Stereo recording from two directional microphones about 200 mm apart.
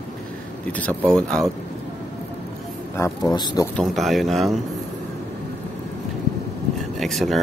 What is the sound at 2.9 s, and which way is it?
Speech, 15° left (ahead or behind).